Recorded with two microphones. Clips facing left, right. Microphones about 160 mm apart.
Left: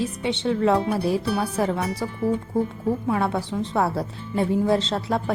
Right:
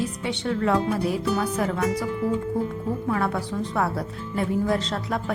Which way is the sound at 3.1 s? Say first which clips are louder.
Left 1 dB; 25° left (ahead or behind).